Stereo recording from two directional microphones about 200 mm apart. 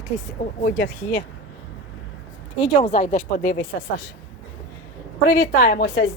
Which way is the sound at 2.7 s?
30° left (ahead or behind).